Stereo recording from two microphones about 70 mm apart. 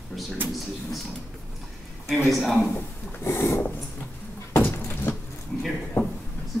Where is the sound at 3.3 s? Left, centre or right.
Left.